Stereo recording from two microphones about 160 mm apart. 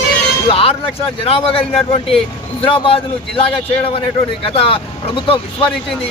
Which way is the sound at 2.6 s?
35° left (ahead or behind).